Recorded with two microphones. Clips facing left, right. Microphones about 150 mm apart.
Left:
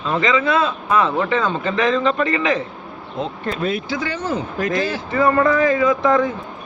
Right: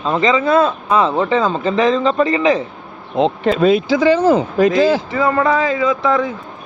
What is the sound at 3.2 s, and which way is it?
Speech, 90° right.